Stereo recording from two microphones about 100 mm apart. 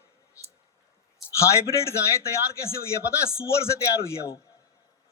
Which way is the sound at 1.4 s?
30° left (ahead or behind).